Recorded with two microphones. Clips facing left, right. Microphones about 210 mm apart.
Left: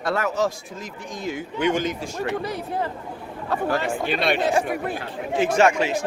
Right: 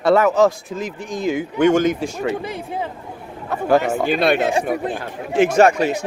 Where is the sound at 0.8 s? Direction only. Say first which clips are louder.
Right 8 dB; 90° right.